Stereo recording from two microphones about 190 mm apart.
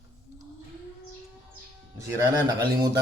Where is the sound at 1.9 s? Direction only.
20° right (ahead or behind).